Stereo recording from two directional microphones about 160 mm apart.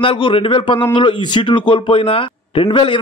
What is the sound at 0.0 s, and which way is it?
Speech, 35° left (ahead or behind).